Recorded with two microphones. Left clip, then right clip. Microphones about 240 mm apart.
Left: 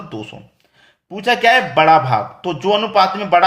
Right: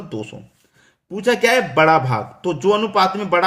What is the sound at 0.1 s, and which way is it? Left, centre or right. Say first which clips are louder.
Speech: even; centre.